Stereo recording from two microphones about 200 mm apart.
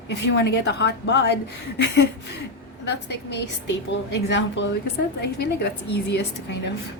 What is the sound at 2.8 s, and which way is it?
A woman's voice, 60° left (ahead or behind).